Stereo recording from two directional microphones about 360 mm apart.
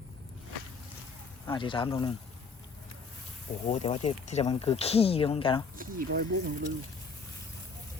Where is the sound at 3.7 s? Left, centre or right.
Centre.